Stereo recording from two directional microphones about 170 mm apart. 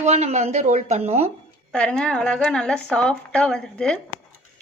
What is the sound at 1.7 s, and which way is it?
A woman's voice, 5° left (ahead or behind).